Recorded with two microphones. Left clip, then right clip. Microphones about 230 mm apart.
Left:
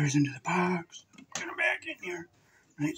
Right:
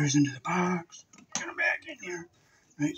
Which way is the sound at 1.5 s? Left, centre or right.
Centre.